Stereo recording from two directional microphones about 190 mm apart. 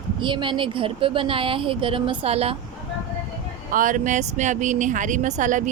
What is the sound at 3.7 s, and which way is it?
Speech, 45° right (ahead or behind).